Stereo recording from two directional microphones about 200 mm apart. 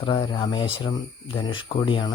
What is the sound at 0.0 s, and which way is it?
Speech, 25° left (ahead or behind).